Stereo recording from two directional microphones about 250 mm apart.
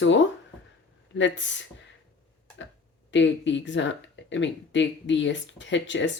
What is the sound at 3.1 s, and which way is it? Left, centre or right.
Speech, left.